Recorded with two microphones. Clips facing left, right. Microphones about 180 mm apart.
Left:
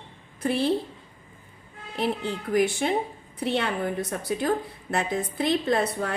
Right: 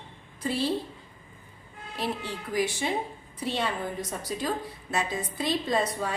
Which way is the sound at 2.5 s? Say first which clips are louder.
Left 5 dB; 55° left (ahead or behind).